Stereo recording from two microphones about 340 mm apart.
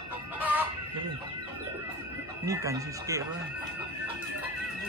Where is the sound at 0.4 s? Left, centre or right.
Centre.